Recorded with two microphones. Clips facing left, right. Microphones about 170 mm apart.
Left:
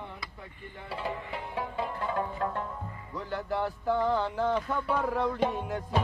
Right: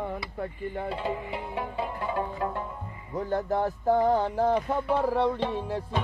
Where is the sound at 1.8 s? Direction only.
15° right (ahead or behind).